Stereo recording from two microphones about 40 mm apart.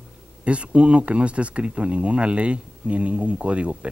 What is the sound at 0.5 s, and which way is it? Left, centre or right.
Speech, right.